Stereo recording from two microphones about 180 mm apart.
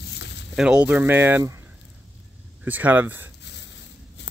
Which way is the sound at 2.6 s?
10° right (ahead or behind).